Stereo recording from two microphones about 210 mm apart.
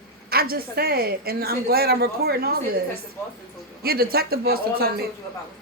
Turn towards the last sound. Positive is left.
turn(degrees=-45)  # may be behind; listen again after turning